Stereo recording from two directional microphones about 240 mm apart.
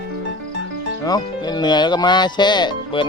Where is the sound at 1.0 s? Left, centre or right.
Centre.